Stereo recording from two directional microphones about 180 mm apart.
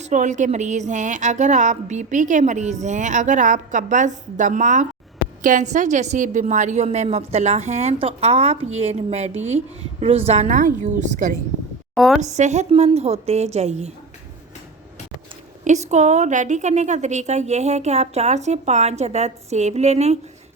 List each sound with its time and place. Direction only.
0.0 s a woman's voice: 45° right (ahead or behind)
11.9 s a woman's voice: centre (ahead or behind)
12.2 s a woman's voice: 40° right (ahead or behind)
15.6 s a woman's voice: 40° right (ahead or behind)